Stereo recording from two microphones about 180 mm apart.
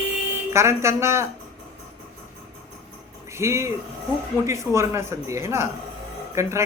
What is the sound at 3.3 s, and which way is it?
Speech, 15° right (ahead or behind).